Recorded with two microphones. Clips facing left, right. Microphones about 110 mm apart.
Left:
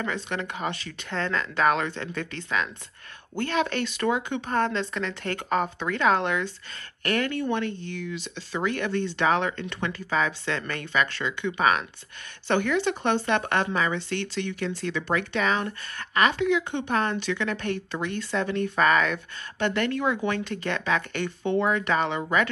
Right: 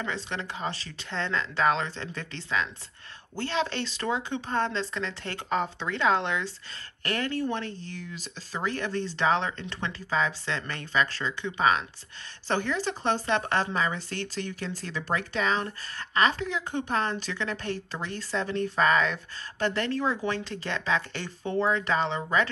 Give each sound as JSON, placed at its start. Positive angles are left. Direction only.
{"t": 0.0, "sound": "speech", "side_deg": -25}